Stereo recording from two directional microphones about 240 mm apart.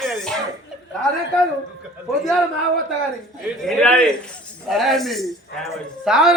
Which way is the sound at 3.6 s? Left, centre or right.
Centre.